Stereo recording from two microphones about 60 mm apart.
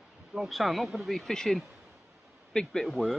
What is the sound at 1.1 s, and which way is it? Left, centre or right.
Speech, centre.